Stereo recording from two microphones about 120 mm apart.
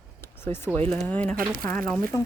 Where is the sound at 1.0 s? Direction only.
10° left (ahead or behind).